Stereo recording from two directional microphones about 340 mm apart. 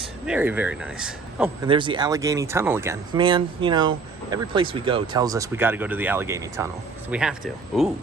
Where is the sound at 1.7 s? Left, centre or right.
Centre.